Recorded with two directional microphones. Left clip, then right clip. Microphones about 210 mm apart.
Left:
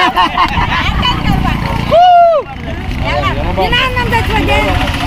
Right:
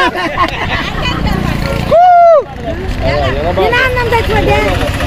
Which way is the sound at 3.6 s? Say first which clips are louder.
Right 1 dB; 15° left (ahead or behind).